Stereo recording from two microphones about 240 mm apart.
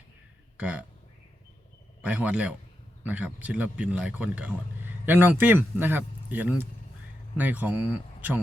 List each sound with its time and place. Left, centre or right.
0.5 s speech: centre
2.0 s speech: centre